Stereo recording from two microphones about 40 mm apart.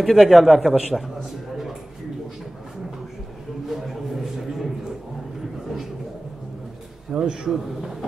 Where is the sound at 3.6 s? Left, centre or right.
Centre.